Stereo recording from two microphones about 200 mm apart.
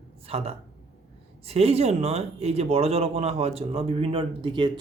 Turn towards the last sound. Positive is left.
turn(degrees=-25)  # may be behind; listen again after turning